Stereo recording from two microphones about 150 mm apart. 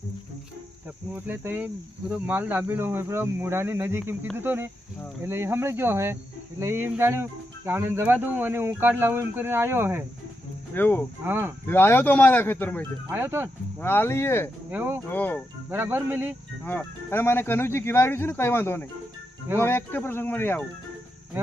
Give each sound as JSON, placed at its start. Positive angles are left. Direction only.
{"t": 1.1, "sound": "speech", "side_deg": -10}
{"t": 10.8, "sound": "speech", "side_deg": 15}
{"t": 11.3, "sound": "speech", "side_deg": -15}
{"t": 11.7, "sound": "speech", "side_deg": 15}
{"t": 13.1, "sound": "speech", "side_deg": -15}
{"t": 13.7, "sound": "speech", "side_deg": 15}
{"t": 14.7, "sound": "speech", "side_deg": -15}
{"t": 15.1, "sound": "speech", "side_deg": 10}
{"t": 15.7, "sound": "speech", "side_deg": -15}
{"t": 16.6, "sound": "speech", "side_deg": 15}